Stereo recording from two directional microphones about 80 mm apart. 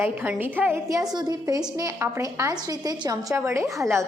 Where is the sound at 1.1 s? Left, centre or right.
Right.